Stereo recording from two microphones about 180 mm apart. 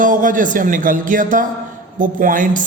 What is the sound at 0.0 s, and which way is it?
A man's voice, 50° right (ahead or behind).